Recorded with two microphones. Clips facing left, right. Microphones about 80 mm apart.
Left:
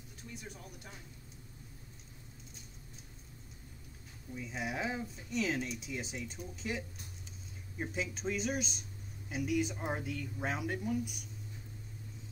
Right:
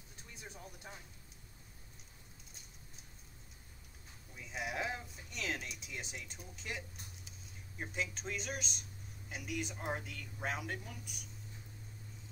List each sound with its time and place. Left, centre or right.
0.3 s speech: right
4.4 s speech: centre
7.8 s speech: centre